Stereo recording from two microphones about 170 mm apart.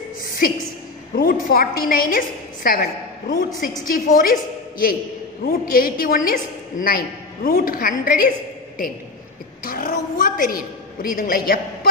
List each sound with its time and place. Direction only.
1.1 s a woman's voice: 55° left (ahead or behind)
9.7 s a woman's voice: 55° left (ahead or behind)